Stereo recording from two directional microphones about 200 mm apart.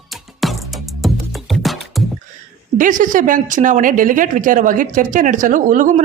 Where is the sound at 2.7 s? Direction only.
40° right (ahead or behind).